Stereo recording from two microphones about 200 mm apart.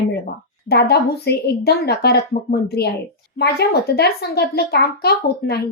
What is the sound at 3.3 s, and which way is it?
A woman's voice, 50° left (ahead or behind).